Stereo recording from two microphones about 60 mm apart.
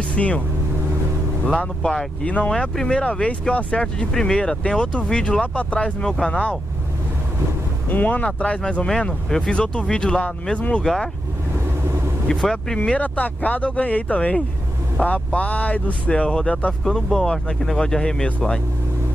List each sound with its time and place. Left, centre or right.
0.1 s speech: left
1.6 s speech: centre
7.9 s speech: left
8.8 s speech: centre
12.3 s speech: centre
16.8 s speech: centre